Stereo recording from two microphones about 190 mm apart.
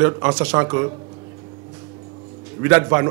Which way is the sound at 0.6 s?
20° right (ahead or behind).